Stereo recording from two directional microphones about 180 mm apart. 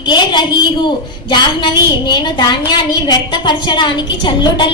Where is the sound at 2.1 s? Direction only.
25° left (ahead or behind).